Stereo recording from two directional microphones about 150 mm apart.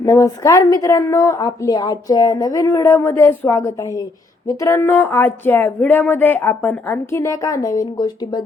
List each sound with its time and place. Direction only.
0.0 s a woman's voice: 20° left (ahead or behind)